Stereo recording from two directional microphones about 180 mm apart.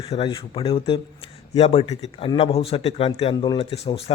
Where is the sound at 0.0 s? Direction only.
30° left (ahead or behind).